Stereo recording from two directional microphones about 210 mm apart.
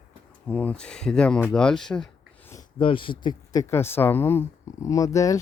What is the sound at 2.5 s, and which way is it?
Speech, 25° left (ahead or behind).